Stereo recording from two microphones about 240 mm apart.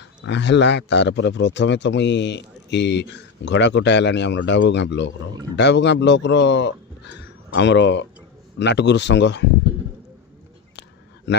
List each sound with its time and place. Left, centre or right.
0.2 s a man's voice: left